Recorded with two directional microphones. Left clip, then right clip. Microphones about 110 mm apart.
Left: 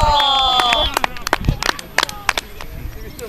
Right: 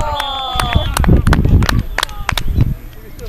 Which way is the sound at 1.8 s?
35° left (ahead or behind).